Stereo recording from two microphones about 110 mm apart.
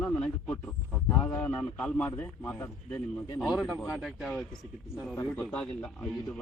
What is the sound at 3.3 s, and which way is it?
Speech, 30° left (ahead or behind).